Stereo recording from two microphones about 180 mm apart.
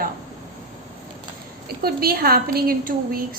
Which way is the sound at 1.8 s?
55° right (ahead or behind).